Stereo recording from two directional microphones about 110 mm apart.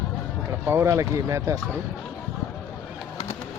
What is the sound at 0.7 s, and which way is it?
Speech, 25° right (ahead or behind).